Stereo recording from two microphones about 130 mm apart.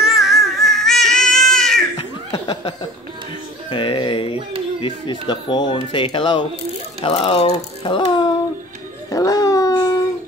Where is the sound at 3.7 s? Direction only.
40° left (ahead or behind).